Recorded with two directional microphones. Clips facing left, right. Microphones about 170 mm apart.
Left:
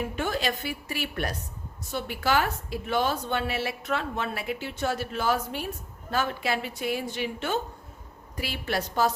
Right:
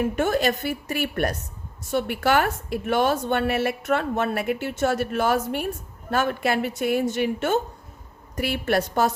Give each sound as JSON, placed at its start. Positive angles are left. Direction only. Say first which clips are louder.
{"t": 0.2, "sound": "a woman's voice", "louder": "right 5 dB", "side_deg": -50}